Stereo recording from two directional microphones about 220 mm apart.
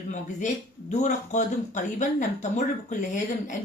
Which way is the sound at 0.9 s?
30° left (ahead or behind).